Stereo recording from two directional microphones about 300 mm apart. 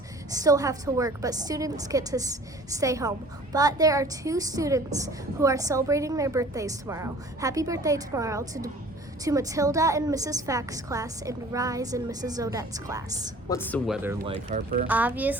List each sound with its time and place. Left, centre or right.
0.3 s a woman's voice: centre
13.5 s speech: centre
14.3 s speech: right
14.8 s speech: centre